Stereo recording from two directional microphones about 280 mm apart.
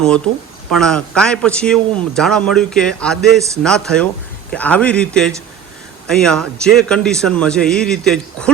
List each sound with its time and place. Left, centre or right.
0.7 s a man's voice: centre